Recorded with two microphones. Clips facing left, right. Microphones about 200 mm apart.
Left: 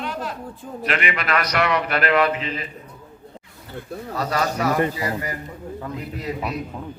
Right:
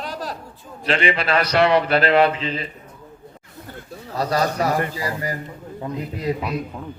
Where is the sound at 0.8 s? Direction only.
30° right (ahead or behind).